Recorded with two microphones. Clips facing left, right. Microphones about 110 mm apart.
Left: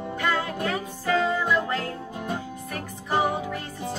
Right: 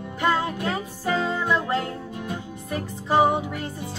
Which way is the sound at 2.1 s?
40° left (ahead or behind).